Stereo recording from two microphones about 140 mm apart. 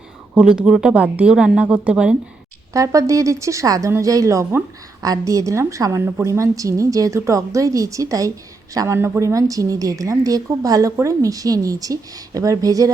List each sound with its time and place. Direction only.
0.3 s a woman's voice: 5° right (ahead or behind)
2.7 s a woman's voice: 20° right (ahead or behind)